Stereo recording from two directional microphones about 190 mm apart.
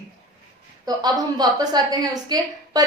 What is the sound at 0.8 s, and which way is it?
A woman's voice, 20° right (ahead or behind).